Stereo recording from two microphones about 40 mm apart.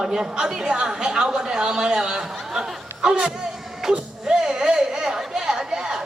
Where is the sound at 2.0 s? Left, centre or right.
Centre.